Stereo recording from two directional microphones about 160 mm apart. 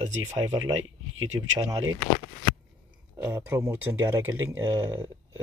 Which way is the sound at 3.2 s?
15° right (ahead or behind).